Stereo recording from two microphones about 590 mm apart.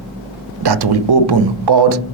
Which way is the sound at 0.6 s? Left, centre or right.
Right.